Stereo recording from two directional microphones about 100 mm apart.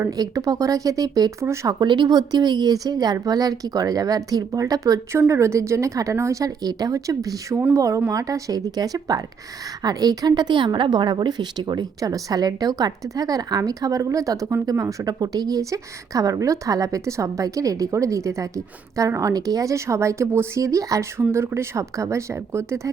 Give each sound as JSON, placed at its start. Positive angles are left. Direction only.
{"t": 0.1, "sound": "a woman's voice", "side_deg": -35}